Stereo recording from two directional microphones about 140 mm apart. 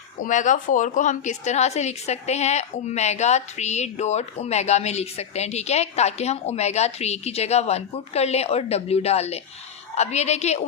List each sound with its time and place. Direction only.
0.2 s a woman's voice: 65° left (ahead or behind)